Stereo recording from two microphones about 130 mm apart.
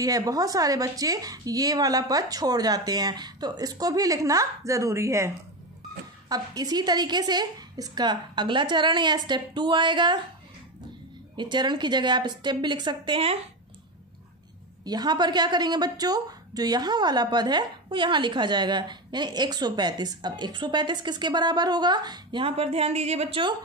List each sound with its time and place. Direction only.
0.0 s a woman's voice: 30° right (ahead or behind)
11.3 s a woman's voice: 35° right (ahead or behind)
14.9 s a woman's voice: 35° right (ahead or behind)
22.6 s a woman's voice: 55° right (ahead or behind)